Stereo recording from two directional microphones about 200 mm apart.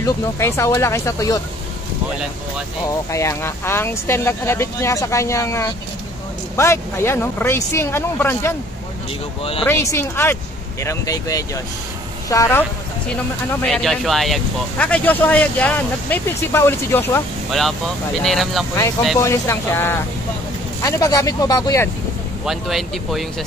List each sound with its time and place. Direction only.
0.0 s speech: 15° left (ahead or behind)
2.9 s speech: 15° left (ahead or behind)
9.4 s speech: 30° left (ahead or behind)
9.7 s speech: 10° left (ahead or behind)
17.5 s speech: centre (ahead or behind)
19.1 s speech: 15° left (ahead or behind)
22.4 s speech: centre (ahead or behind)